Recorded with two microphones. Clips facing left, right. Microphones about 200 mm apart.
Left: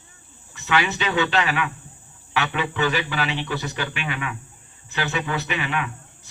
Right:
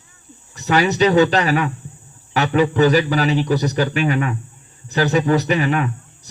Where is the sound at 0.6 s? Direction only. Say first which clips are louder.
Right 8 dB; 40° right (ahead or behind).